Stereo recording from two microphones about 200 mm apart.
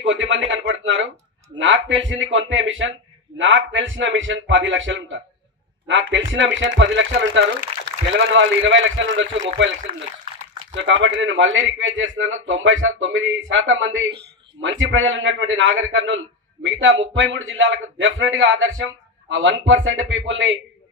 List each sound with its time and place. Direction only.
0.0 s a man's voice: 65° right (ahead or behind)
10.7 s a man's voice: 65° right (ahead or behind)